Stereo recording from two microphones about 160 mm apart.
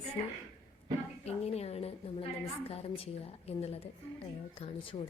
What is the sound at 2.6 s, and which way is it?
A woman's voice, 35° left (ahead or behind).